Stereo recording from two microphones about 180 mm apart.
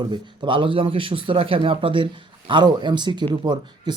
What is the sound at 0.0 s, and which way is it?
Speech, 25° right (ahead or behind).